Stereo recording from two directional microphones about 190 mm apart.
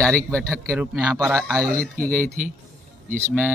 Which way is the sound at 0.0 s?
5° left (ahead or behind).